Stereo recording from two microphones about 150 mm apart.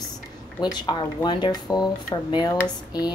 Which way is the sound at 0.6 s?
30° left (ahead or behind).